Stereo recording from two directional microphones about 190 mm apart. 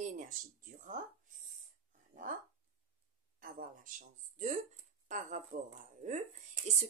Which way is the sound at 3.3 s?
50° right (ahead or behind).